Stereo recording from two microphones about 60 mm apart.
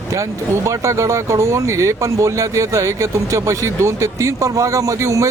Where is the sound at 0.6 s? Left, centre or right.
Right.